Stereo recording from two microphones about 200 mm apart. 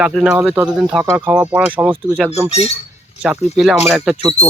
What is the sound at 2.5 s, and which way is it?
Speech, 30° left (ahead or behind).